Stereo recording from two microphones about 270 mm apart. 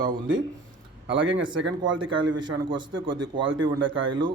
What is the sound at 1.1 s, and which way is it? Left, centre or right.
Speech, right.